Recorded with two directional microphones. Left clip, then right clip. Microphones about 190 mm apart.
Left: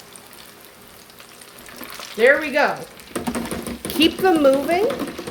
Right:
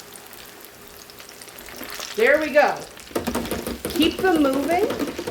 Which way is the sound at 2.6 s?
55° left (ahead or behind).